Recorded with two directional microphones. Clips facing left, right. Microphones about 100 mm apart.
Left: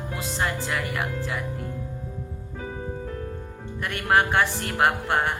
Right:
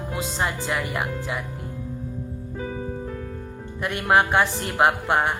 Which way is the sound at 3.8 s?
20° right (ahead or behind).